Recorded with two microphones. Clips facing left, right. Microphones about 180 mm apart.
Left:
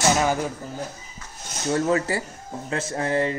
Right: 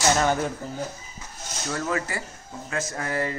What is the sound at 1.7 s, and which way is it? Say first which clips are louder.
Speech: left 6 dB; 30° left (ahead or behind).